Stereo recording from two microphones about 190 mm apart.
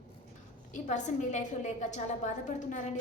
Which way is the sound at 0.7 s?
40° left (ahead or behind).